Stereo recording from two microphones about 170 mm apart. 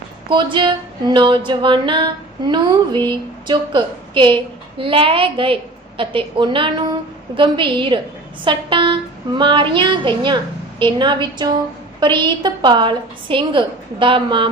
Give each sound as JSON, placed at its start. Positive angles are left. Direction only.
{"t": 0.3, "sound": "a woman's voice", "side_deg": -30}